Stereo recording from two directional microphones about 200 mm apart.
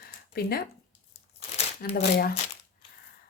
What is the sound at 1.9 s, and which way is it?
Speech, 50° left (ahead or behind).